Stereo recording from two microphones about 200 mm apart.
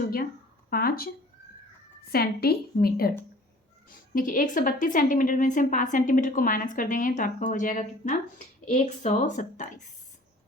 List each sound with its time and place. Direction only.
0.7 s a woman's voice: 50° left (ahead or behind)